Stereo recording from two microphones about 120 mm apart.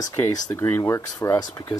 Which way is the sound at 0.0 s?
25° left (ahead or behind).